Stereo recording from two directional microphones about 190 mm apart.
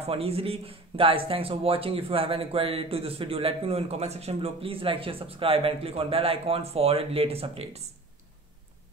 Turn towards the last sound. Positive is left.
turn(degrees=-30)  # may be behind; listen again after turning